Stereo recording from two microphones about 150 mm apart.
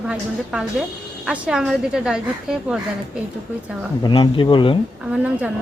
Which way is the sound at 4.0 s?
30° left (ahead or behind).